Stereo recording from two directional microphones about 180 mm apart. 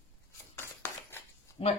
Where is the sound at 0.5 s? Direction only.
15° left (ahead or behind).